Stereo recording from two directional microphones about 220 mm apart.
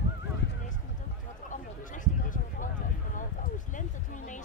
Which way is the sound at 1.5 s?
35° left (ahead or behind).